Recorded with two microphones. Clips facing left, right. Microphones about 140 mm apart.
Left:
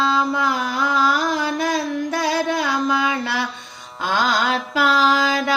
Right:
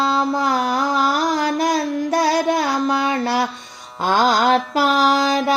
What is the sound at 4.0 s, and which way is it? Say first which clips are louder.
Female singing: right 4 dB; 45° right (ahead or behind).